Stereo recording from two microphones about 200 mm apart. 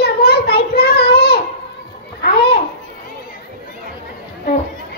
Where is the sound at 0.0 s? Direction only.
50° left (ahead or behind).